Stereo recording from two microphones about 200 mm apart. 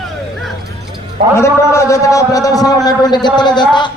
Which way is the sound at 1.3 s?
15° left (ahead or behind).